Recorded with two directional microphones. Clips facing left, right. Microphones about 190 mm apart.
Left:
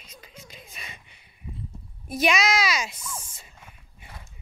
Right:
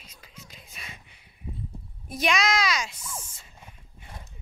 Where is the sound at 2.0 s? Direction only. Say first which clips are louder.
Left 2 dB; 5° left (ahead or behind).